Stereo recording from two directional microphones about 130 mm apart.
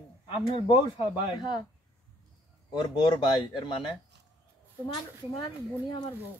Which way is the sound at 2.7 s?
35° left (ahead or behind).